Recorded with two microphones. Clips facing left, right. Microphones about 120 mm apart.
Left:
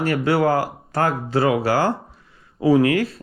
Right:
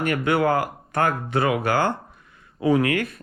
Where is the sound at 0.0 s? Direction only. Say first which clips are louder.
Left 2 dB; 35° left (ahead or behind).